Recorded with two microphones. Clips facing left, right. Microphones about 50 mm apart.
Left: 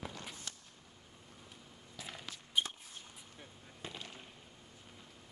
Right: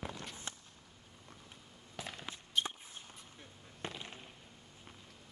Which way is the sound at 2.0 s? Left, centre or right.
Right.